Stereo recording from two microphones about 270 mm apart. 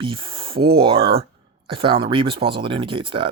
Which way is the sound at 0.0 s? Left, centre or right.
Centre.